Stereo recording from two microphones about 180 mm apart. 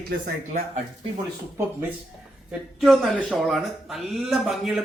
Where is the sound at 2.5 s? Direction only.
Centre (ahead or behind).